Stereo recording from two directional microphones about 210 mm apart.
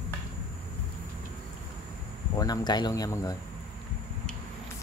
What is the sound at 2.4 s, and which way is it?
Speech, 20° left (ahead or behind).